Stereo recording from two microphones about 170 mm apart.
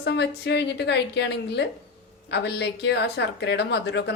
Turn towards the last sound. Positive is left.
turn(degrees=85)